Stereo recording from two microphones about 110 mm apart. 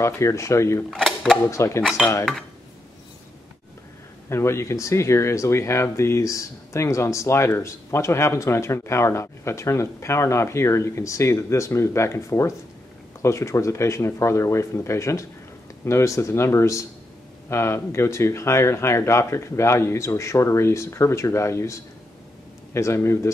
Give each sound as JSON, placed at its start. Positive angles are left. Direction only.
{"t": 0.0, "sound": "speech", "side_deg": 25}
{"t": 0.8, "sound": "speech", "side_deg": 0}
{"t": 1.5, "sound": "speech", "side_deg": 25}
{"t": 2.0, "sound": "speech", "side_deg": -5}
{"t": 4.3, "sound": "speech", "side_deg": 25}